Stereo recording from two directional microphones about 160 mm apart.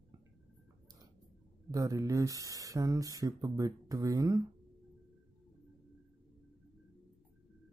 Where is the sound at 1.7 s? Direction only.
20° right (ahead or behind).